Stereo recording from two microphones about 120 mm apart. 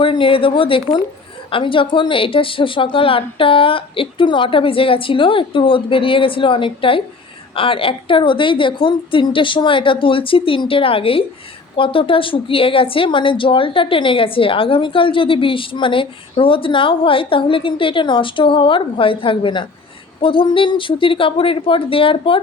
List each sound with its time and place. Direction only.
0.0 s speech: 45° left (ahead or behind)